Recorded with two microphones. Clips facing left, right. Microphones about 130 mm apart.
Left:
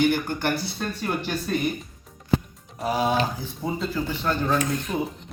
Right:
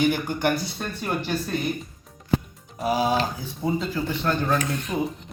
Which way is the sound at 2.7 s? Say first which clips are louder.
Right 1 dB; 5° right (ahead or behind).